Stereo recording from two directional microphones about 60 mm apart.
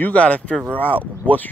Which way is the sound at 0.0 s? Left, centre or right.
Left.